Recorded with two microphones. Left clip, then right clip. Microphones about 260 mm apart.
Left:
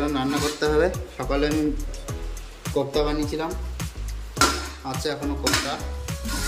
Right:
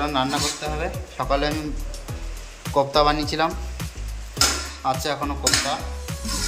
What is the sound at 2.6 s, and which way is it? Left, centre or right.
Speech, centre.